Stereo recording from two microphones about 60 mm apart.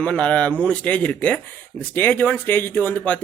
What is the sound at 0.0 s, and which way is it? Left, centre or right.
Speech, left.